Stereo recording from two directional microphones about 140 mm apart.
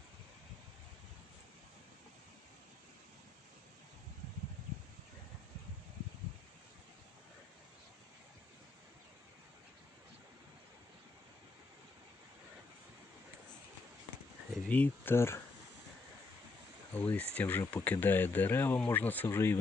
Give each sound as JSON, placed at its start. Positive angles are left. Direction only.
{"t": 14.7, "sound": "speech", "side_deg": 15}
{"t": 16.9, "sound": "speech", "side_deg": 10}